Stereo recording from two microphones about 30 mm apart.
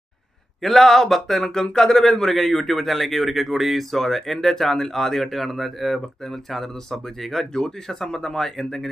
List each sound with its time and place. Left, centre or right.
0.6 s speech: centre
3.9 s speech: centre
7.5 s speech: centre